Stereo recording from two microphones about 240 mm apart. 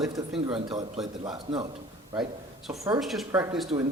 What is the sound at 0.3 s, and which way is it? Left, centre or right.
A man's voice, right.